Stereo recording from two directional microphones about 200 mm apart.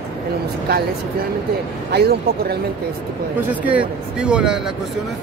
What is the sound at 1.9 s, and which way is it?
Speech, 55° right (ahead or behind).